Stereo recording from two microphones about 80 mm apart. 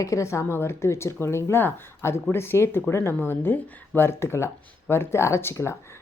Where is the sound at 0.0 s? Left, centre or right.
Left.